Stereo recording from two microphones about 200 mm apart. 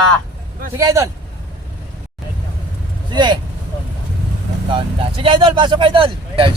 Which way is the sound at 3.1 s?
20° right (ahead or behind).